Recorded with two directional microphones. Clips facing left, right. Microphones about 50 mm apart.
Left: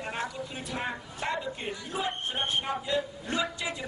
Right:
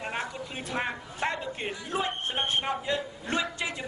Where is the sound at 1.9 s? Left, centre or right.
Right.